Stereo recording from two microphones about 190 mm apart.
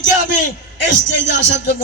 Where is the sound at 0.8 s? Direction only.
70° left (ahead or behind).